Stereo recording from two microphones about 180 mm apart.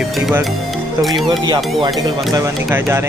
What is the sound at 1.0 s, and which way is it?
Speech, centre (ahead or behind).